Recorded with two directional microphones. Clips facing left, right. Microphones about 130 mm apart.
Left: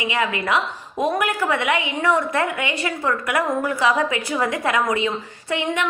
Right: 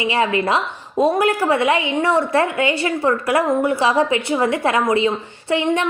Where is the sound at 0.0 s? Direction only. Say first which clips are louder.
Right 5 dB; 30° right (ahead or behind).